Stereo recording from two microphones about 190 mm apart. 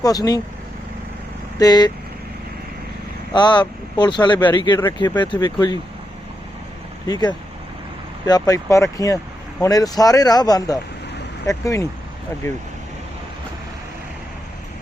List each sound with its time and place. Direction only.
0.0 s speech: 20° left (ahead or behind)
1.5 s speech: 20° left (ahead or behind)
3.3 s speech: 25° left (ahead or behind)
7.1 s speech: 20° left (ahead or behind)